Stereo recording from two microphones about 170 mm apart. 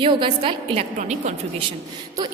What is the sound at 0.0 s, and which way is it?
Speech, 30° right (ahead or behind).